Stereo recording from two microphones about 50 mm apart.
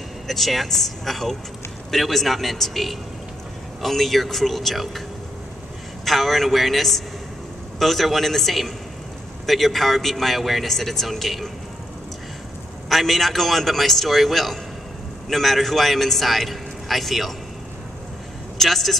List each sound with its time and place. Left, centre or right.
0.3 s a man's voice: centre
6.0 s a man's voice: centre
12.9 s a man's voice: centre
18.6 s a man's voice: centre